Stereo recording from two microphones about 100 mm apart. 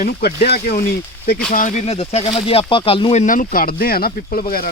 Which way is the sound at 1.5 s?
90° left.